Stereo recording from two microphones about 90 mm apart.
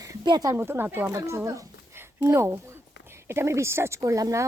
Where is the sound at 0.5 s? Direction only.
25° right (ahead or behind).